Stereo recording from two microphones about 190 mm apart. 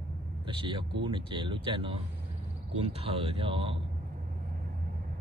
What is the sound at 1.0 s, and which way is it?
Speech, 25° right (ahead or behind).